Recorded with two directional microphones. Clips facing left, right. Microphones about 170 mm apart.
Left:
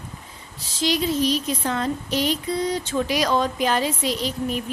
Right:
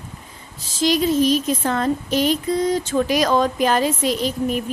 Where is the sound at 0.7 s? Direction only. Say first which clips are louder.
Right 5 dB; 45° right (ahead or behind).